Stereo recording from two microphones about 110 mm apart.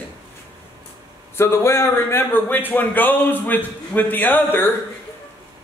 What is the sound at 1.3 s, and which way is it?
A man's voice, 25° left (ahead or behind).